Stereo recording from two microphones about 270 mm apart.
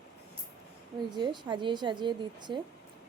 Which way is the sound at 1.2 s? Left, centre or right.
Centre.